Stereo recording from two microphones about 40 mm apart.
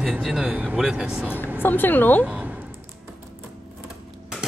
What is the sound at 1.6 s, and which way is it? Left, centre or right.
Speech, left.